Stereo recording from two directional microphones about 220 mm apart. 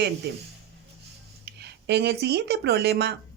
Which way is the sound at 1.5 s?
50° right (ahead or behind).